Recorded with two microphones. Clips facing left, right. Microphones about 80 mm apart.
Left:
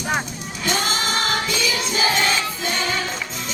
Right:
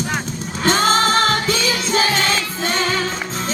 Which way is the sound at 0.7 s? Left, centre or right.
Right.